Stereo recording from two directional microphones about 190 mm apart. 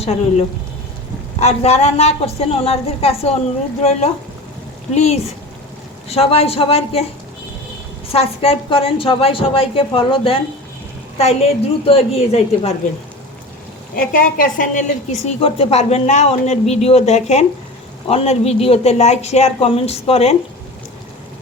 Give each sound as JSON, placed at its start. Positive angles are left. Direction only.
{"t": 0.0, "sound": "a woman's voice", "side_deg": 35}
{"t": 4.9, "sound": "a woman's voice", "side_deg": 35}
{"t": 8.1, "sound": "a woman's voice", "side_deg": 30}
{"t": 13.9, "sound": "a woman's voice", "side_deg": 45}